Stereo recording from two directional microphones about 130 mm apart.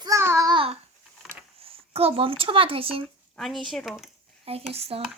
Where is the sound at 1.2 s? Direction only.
Centre (ahead or behind).